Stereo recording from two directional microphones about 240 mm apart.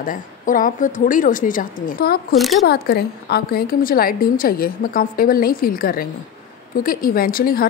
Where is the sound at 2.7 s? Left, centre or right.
Left.